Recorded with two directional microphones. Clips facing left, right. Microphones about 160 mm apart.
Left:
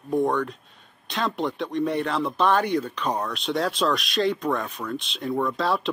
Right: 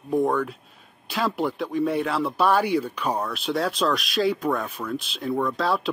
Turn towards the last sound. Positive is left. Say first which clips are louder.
# even
turn(degrees=0)  # may be behind; listen again after turning